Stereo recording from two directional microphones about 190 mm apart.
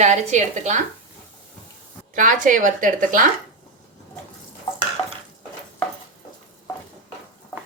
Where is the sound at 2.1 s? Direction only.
45° right (ahead or behind).